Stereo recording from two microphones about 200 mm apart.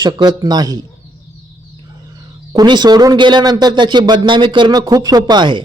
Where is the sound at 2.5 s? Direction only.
20° right (ahead or behind).